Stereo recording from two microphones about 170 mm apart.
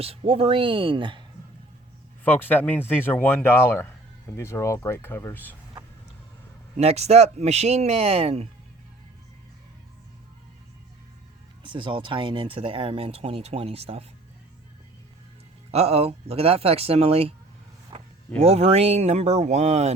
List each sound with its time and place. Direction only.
0.0 s speech: 35° right (ahead or behind)
2.2 s speech: 10° left (ahead or behind)
6.7 s speech: 40° right (ahead or behind)
11.6 s speech: 30° right (ahead or behind)
15.7 s speech: 35° right (ahead or behind)
17.9 s vehicle: 35° right (ahead or behind)
18.4 s speech: 35° right (ahead or behind)